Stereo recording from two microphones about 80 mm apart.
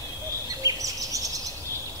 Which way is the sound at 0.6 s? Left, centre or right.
Right.